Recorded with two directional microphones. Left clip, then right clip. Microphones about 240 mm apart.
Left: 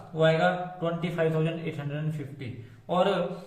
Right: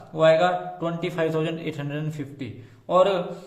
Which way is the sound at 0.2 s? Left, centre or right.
Right.